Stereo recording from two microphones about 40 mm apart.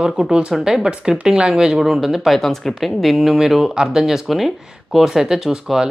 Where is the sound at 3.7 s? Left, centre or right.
Centre.